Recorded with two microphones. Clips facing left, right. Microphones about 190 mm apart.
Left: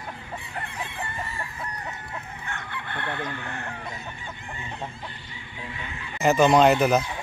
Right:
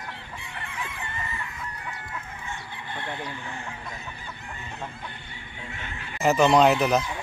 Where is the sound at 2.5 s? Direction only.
60° left (ahead or behind).